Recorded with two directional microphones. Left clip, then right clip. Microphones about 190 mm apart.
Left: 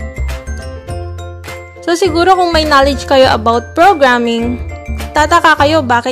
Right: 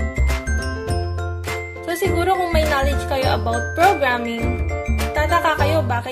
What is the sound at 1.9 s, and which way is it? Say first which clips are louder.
Speech: left 10 dB; 50° left (ahead or behind).